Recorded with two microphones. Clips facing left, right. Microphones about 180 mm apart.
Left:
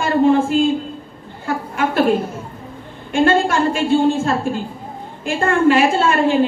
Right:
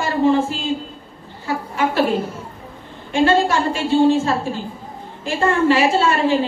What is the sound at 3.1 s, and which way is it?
A woman's voice, 50° left (ahead or behind).